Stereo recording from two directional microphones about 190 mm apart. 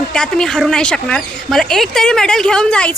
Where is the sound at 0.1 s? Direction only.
5° left (ahead or behind).